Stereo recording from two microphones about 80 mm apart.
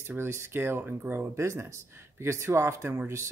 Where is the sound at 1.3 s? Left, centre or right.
Right.